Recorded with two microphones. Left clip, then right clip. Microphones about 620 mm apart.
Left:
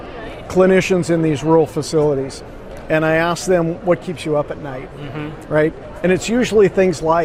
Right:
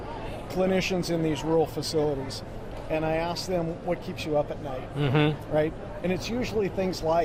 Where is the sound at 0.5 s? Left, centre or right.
Left.